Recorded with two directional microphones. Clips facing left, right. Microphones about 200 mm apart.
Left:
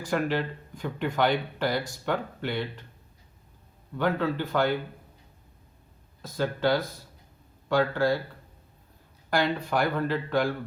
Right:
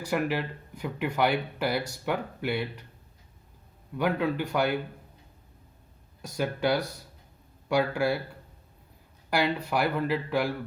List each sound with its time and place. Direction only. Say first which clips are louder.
0.1 s speech: left 1 dB; 10° right (ahead or behind)
3.9 s speech: even; 10° right (ahead or behind)
6.2 s speech: left 1 dB; 15° right (ahead or behind)